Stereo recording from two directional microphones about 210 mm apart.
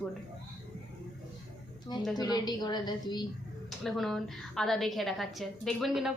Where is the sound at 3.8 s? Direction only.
Centre (ahead or behind).